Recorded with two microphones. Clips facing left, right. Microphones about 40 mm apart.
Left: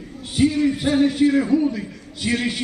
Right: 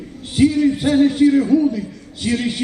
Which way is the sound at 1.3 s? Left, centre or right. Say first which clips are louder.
Right 4 dB; centre.